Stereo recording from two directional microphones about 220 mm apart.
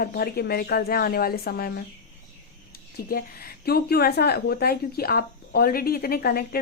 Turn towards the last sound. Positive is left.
turn(degrees=45)  # may be behind; listen again after turning